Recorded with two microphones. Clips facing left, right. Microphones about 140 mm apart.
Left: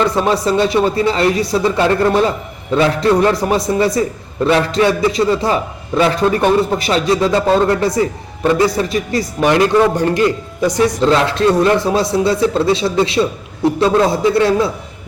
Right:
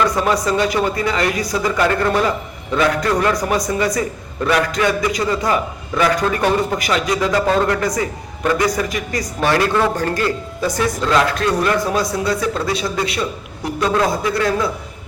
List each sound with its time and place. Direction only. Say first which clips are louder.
0.0 s a man's voice: left 2 dB; 30° left (ahead or behind)